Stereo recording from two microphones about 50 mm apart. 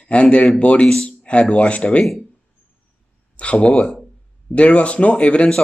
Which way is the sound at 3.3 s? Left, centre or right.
Left.